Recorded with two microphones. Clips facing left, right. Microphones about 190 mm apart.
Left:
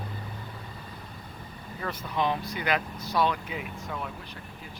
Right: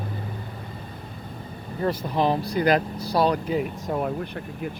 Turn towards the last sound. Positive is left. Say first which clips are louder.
# right 11 dB
turn(degrees=-50)  # may be behind; listen again after turning